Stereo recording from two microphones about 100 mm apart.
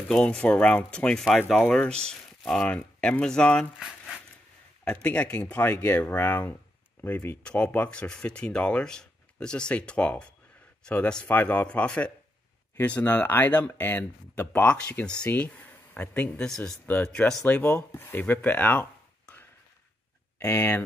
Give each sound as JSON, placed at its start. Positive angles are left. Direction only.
{"t": 0.1, "sound": "speech", "side_deg": 5}
{"t": 16.8, "sound": "speech", "side_deg": 15}
{"t": 20.3, "sound": "speech", "side_deg": 25}